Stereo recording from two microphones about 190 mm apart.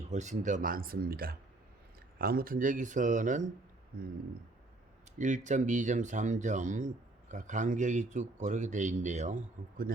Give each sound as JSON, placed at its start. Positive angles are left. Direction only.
{"t": 0.1, "sound": "speech", "side_deg": -40}
{"t": 5.1, "sound": "speech", "side_deg": -40}